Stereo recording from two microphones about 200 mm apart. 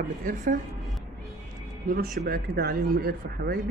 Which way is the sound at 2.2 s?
50° right (ahead or behind).